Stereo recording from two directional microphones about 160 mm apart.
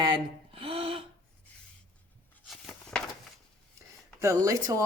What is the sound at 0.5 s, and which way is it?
Gasp, 35° right (ahead or behind).